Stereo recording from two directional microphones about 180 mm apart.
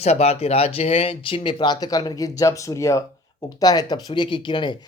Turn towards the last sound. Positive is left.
turn(degrees=25)  # may be behind; listen again after turning